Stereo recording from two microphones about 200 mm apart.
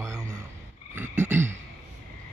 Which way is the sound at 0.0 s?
15° right (ahead or behind).